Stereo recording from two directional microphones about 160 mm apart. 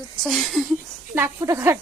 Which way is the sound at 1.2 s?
15° right (ahead or behind).